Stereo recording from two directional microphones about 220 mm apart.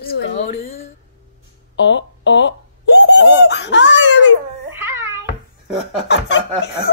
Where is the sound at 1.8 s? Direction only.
55° left (ahead or behind).